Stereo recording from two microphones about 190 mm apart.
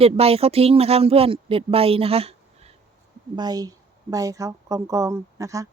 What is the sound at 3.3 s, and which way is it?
A woman's voice, 20° right (ahead or behind).